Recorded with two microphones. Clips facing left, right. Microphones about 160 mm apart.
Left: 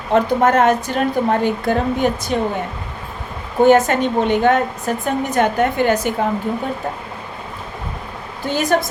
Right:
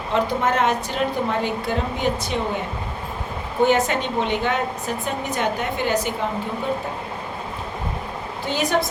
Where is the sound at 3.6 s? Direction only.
50° left (ahead or behind).